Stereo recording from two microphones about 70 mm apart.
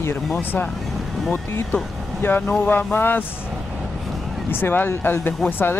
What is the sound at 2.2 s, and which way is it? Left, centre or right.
Speech, left.